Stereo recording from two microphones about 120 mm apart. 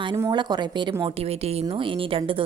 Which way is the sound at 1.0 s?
50° right (ahead or behind).